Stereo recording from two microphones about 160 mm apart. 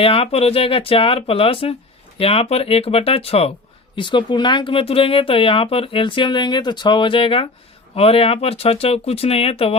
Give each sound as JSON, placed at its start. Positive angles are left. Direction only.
{"t": 0.0, "sound": "speech", "side_deg": 35}